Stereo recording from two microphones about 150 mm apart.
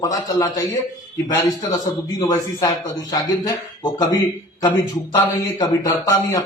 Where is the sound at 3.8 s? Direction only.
25° left (ahead or behind).